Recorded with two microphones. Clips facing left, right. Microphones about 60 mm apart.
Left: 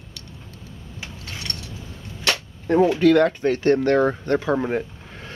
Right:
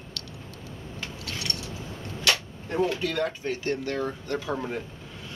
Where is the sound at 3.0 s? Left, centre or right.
Left.